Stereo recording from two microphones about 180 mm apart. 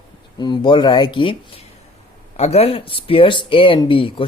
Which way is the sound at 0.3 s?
25° left (ahead or behind).